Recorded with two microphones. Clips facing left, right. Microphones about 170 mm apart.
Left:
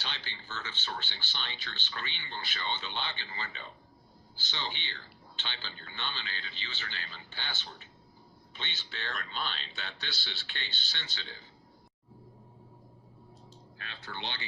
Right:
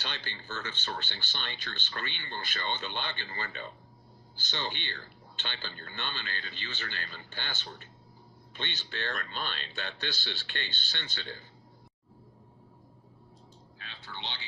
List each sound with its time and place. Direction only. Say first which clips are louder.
0.0 s speech: right 2 dB; 50° right (ahead or behind)
8.5 s speech: right 5 dB; 50° right (ahead or behind)
13.7 s speech: left 3 dB; 55° left (ahead or behind)